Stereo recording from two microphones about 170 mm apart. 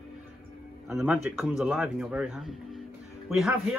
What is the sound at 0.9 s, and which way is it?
A man's voice, 5° right (ahead or behind).